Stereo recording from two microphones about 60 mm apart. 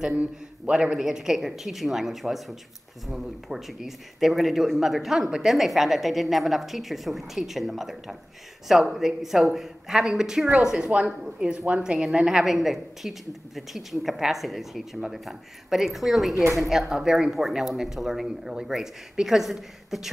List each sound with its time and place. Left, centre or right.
0.2 s a woman's voice: centre